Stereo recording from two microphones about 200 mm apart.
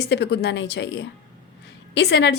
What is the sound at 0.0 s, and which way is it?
A woman's voice, 55° left (ahead or behind).